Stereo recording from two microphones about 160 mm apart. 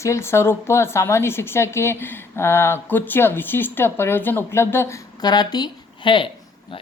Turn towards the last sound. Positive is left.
turn(degrees=30)  # may be behind; listen again after turning